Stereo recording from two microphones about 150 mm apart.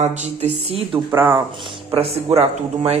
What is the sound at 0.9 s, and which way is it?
Speech, 10° right (ahead or behind).